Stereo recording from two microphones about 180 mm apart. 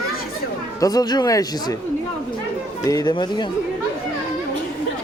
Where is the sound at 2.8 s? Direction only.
20° left (ahead or behind).